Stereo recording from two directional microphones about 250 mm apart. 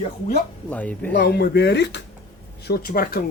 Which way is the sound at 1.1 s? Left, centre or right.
Left.